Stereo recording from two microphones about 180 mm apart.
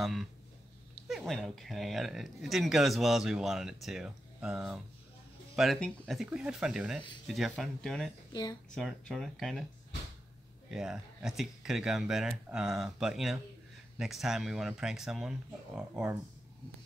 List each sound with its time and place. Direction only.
0.0 s speech: centre (ahead or behind)
8.3 s speech: 20° left (ahead or behind)
8.7 s speech: 5° left (ahead or behind)
10.7 s speech: 5° right (ahead or behind)